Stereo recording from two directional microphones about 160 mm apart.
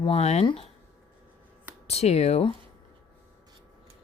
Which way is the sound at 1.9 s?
40° left (ahead or behind).